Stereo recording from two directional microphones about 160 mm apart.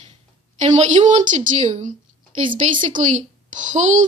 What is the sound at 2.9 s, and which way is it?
Speech, 50° right (ahead or behind).